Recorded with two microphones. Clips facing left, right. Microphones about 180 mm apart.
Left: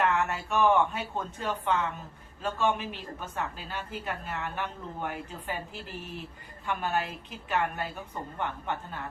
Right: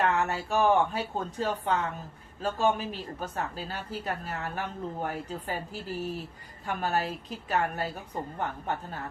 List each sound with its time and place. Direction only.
0.1 s a woman's voice: 35° right (ahead or behind)
6.7 s a woman's voice: 40° right (ahead or behind)